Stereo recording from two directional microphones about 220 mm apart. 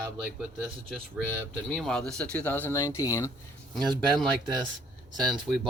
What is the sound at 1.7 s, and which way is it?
Speech, 5° left (ahead or behind).